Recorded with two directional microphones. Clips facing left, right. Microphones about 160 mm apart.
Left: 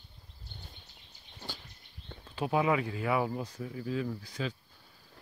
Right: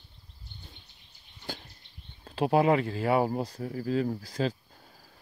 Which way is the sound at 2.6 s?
35° right (ahead or behind).